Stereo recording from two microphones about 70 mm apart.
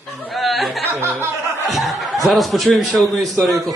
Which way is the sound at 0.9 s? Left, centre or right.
Right.